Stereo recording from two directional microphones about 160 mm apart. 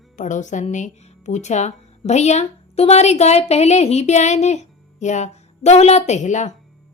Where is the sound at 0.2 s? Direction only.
50° left (ahead or behind).